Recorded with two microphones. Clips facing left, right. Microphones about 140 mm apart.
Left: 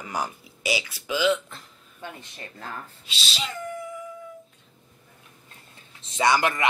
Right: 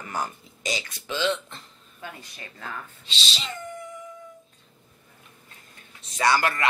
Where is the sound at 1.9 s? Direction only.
30° left (ahead or behind).